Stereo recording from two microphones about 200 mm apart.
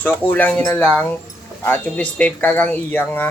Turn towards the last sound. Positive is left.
turn(degrees=10)  # may be behind; listen again after turning